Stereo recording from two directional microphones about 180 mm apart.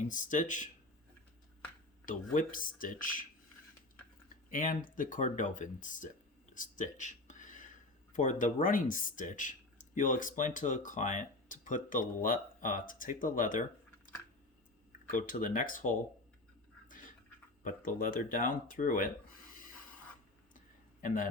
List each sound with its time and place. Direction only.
0.1 s speech: 45° left (ahead or behind)
2.0 s speech: 50° left (ahead or behind)
4.5 s speech: 50° left (ahead or behind)
6.5 s a sound: 45° left (ahead or behind)
8.1 s speech: 45° left (ahead or behind)
15.1 s speech: 50° left (ahead or behind)
17.6 s speech: 50° left (ahead or behind)